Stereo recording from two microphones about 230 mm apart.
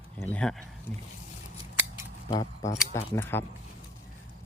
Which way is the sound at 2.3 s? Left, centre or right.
Centre.